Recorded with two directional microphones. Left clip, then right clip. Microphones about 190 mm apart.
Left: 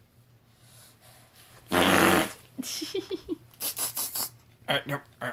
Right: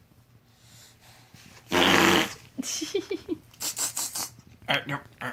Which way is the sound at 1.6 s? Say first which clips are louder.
Right 1 dB; 30° left (ahead or behind).